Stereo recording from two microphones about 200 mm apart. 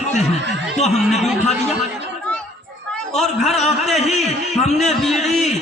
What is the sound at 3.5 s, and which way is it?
A man's voice, 35° left (ahead or behind).